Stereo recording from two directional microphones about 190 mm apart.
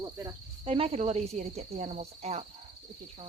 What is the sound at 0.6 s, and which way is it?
Cricket, 30° right (ahead or behind).